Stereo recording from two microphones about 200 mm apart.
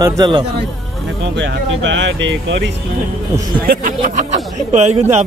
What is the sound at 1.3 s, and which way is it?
Speech, 70° right (ahead or behind).